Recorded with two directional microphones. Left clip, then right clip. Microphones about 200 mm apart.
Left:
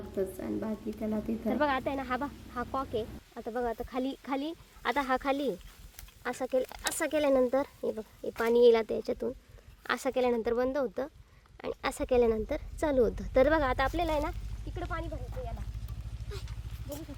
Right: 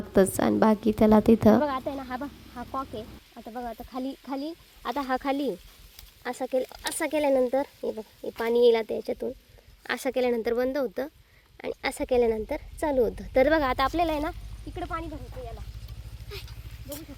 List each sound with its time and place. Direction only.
0.2 s a woman's voice: 40° right (ahead or behind)
1.6 s speech: 5° right (ahead or behind); by 14.3 s 20° right (ahead or behind)
14.8 s a woman's voice: 30° right (ahead or behind)
16.3 s speech: 10° left (ahead or behind)